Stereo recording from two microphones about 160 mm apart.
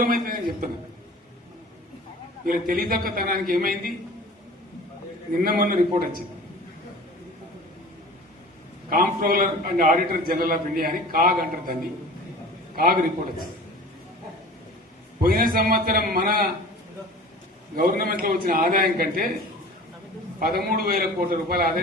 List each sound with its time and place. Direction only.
0.0 s a man's voice: 60° right (ahead or behind)
2.5 s a man's voice: 65° right (ahead or behind)
5.4 s a man's voice: 65° right (ahead or behind)
8.9 s a man's voice: 65° right (ahead or behind)
12.7 s a man's voice: 65° right (ahead or behind)
15.2 s a man's voice: 65° right (ahead or behind)
17.7 s a man's voice: 65° right (ahead or behind)
20.4 s a man's voice: 70° right (ahead or behind)